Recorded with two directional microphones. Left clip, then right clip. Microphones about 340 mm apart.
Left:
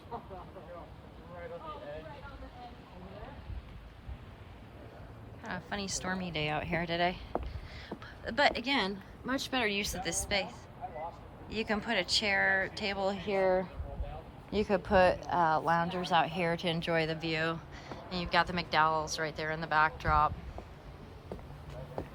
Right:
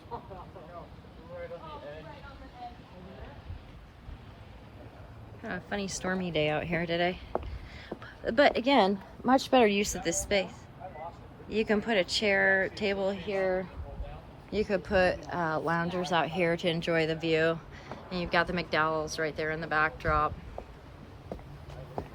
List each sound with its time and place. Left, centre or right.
5.4 s a woman's voice: centre
11.4 s speech: centre